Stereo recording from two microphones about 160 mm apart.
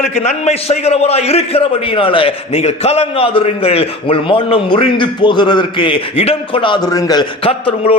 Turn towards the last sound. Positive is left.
turn(degrees=35)  # may be behind; listen again after turning